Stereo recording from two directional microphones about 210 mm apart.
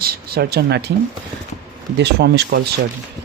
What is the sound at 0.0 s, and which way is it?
Speech, 45° right (ahead or behind).